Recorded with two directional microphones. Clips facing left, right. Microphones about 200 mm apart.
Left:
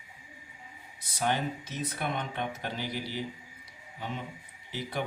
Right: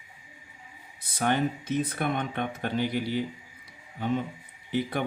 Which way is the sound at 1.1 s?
55° right (ahead or behind).